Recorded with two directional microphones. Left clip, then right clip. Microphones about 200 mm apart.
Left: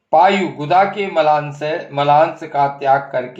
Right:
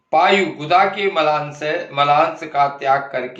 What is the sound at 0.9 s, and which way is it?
Speech, 40° left (ahead or behind).